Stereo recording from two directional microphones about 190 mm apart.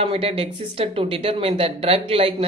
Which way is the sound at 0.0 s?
30° right (ahead or behind).